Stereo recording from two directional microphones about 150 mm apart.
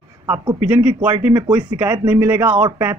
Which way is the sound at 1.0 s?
10° right (ahead or behind).